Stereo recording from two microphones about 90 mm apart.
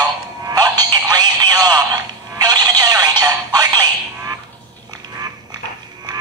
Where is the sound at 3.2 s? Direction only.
45° right (ahead or behind).